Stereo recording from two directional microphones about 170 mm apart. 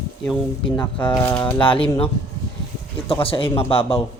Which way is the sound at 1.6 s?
30° left (ahead or behind).